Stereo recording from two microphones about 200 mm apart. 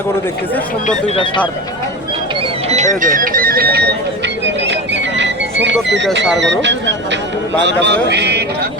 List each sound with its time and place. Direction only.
0.9 s speech: 30° left (ahead or behind)
2.6 s speech: 35° right (ahead or behind); by 3.9 s 55° right (ahead or behind)
4.4 s music: 60° right (ahead or behind)
6.4 s speech: 65° right (ahead or behind)